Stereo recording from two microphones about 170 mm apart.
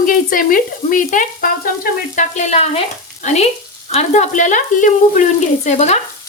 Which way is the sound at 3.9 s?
40° left (ahead or behind).